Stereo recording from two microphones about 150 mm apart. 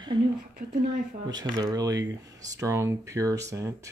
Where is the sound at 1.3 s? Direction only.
25° right (ahead or behind).